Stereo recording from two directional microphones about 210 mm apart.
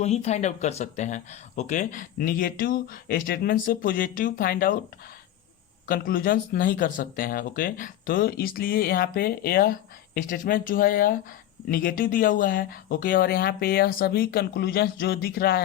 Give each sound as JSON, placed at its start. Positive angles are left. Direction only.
{"t": 0.0, "sound": "speech", "side_deg": 30}
{"t": 5.9, "sound": "speech", "side_deg": 45}